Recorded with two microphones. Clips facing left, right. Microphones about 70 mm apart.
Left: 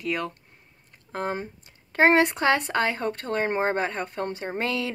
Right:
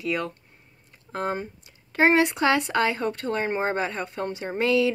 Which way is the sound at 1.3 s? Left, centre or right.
Left.